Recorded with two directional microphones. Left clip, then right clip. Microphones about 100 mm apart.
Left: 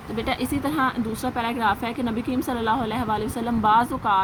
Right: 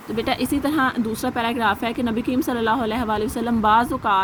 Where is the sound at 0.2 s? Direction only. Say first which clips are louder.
Right 3 dB; 50° right (ahead or behind).